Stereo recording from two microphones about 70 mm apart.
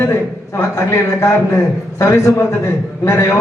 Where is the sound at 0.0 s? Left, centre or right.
Left.